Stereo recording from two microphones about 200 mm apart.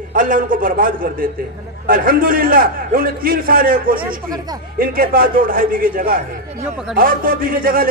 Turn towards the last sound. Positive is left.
turn(degrees=-45)  # may be behind; listen again after turning